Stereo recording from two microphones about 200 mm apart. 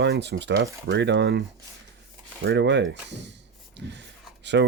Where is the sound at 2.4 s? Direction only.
60° right (ahead or behind).